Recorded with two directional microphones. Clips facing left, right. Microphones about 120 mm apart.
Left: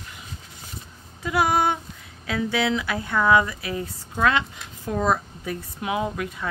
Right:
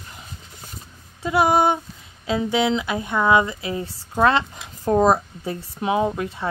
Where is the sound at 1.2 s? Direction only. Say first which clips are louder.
Right 4 dB; 25° right (ahead or behind).